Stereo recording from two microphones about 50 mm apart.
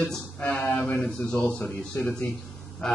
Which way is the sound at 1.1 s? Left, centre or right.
Left.